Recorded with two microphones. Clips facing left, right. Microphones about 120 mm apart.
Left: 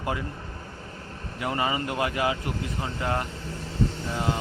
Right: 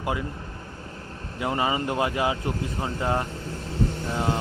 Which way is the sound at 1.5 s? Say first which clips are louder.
Right 2 dB; 20° right (ahead or behind).